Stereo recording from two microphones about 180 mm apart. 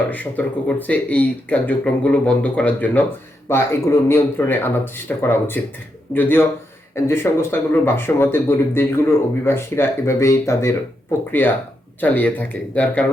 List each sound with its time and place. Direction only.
0.1 s speech: 10° left (ahead or behind)